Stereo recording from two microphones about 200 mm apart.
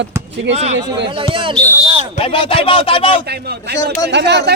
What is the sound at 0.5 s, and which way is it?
Speech, 35° right (ahead or behind).